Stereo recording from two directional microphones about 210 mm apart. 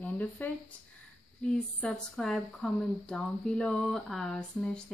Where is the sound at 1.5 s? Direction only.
5° left (ahead or behind).